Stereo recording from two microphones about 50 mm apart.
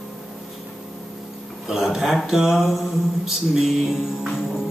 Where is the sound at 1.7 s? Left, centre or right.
Centre.